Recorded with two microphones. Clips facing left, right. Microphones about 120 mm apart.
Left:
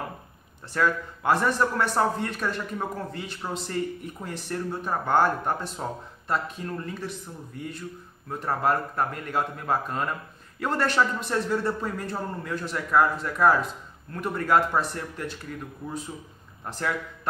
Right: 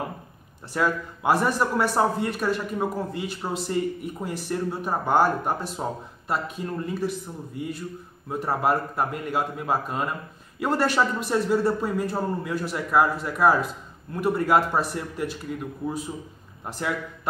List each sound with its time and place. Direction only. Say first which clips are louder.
0.7 s speech: even; 10° right (ahead or behind)
16.6 s speech: right 1 dB; 10° right (ahead or behind)